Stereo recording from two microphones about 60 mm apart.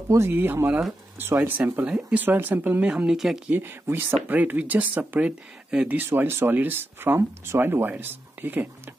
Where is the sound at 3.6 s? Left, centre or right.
Right; by 5.9 s centre.